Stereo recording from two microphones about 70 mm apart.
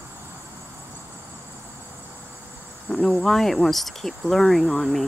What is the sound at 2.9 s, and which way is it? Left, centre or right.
Cricket, centre.